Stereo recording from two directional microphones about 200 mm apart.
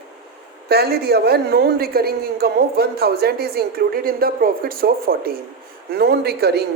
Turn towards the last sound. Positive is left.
turn(degrees=-55)  # may be behind; listen again after turning